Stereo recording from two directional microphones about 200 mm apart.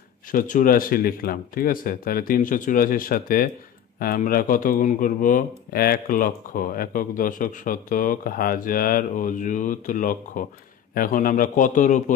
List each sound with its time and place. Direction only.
0.3 s a man's voice: 45° left (ahead or behind)